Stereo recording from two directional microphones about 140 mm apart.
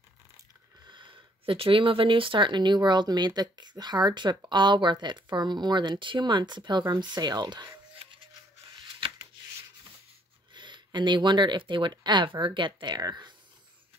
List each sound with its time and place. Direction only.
0.8 s speech: 35° right (ahead or behind)
10.5 s speech: 35° right (ahead or behind)